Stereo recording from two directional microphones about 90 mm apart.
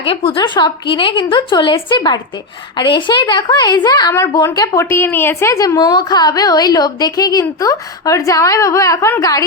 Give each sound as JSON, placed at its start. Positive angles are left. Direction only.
{"t": 0.0, "sound": "a woman's voice", "side_deg": 90}
{"t": 0.3, "sound": "a woman's voice", "side_deg": 55}
{"t": 2.0, "sound": "a woman's voice", "side_deg": 50}
{"t": 4.5, "sound": "a woman's voice", "side_deg": 40}